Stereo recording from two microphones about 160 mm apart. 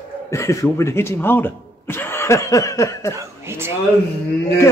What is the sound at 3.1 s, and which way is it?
Speech, 15° right (ahead or behind).